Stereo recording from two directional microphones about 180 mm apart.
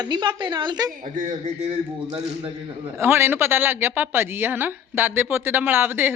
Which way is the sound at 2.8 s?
15° right (ahead or behind).